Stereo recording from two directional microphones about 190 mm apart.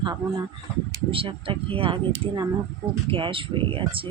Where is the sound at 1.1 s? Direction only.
30° right (ahead or behind).